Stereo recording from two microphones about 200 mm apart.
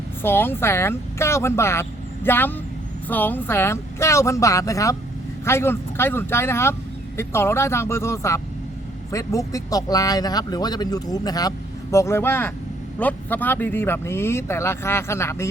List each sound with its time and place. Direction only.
0.2 s speech: 10° left (ahead or behind)